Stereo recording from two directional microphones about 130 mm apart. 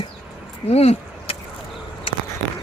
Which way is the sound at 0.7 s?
50° left (ahead or behind).